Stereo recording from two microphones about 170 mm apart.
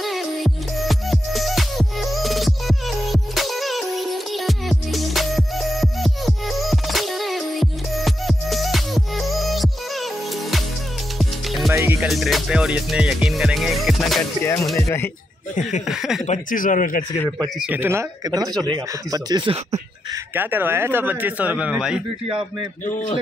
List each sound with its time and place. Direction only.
0.0 s music: centre (ahead or behind)
11.1 s music: centre (ahead or behind)
11.7 s music: 15° right (ahead or behind)
12.1 s music: centre (ahead or behind)
14.4 s music: 15° left (ahead or behind)
15.9 s music: centre (ahead or behind)
16.3 s speech: 50° left (ahead or behind)
17.6 s a man's voice: 10° right (ahead or behind); by 19.8 s 30° right (ahead or behind)
20.3 s a man's voice: 10° right (ahead or behind)